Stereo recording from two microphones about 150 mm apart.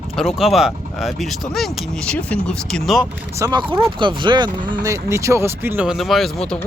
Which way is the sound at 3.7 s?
35° right (ahead or behind).